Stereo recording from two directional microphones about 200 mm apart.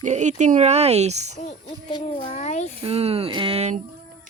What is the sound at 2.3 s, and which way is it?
Speech, 35° left (ahead or behind).